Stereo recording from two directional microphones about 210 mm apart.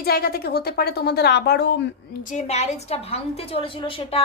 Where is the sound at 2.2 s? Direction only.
35° left (ahead or behind).